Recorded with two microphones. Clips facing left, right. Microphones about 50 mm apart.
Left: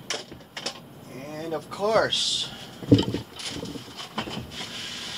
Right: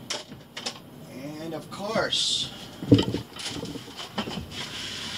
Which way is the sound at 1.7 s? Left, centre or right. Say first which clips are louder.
Left 5 dB; left.